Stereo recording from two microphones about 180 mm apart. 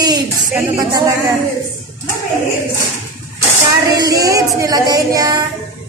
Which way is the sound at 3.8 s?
20° right (ahead or behind).